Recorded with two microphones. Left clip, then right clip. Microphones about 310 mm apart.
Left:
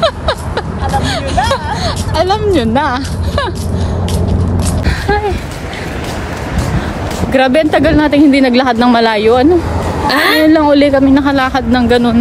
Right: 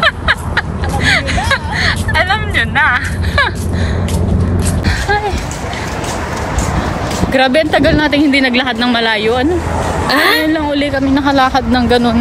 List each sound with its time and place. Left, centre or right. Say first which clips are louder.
0.0 s hubbub: right 1 dB; centre
7.3 s speech: left 1 dB; centre
10.0 s a woman's voice: left 1 dB; centre
10.5 s speech: left 6 dB; left